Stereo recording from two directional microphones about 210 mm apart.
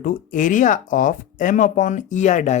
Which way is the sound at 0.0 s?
40° left (ahead or behind).